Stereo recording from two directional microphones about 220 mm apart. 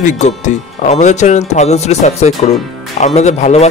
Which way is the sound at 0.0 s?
30° left (ahead or behind).